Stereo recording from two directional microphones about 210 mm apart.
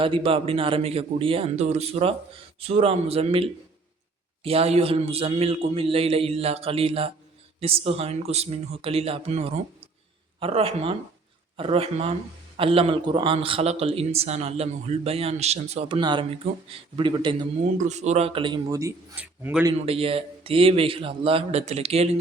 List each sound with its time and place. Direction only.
0.0 s a man's voice: 25° right (ahead or behind)
17.6 s a man's voice: 35° right (ahead or behind); by 19.7 s 10° right (ahead or behind)
19.7 s a man's voice: 30° right (ahead or behind)